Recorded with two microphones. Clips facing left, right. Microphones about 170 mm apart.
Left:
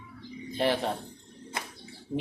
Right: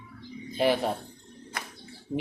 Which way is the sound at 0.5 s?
10° right (ahead or behind).